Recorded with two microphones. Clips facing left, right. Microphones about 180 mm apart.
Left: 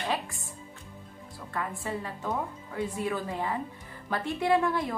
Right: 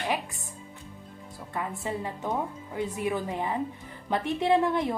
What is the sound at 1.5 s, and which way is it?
Speech, 20° right (ahead or behind).